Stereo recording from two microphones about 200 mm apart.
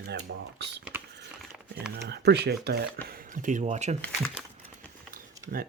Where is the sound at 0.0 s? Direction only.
55° right (ahead or behind).